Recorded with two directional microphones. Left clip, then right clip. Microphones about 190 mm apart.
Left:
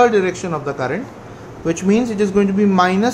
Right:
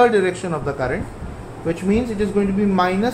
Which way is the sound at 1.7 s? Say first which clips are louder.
Left 3 dB; 25° left (ahead or behind).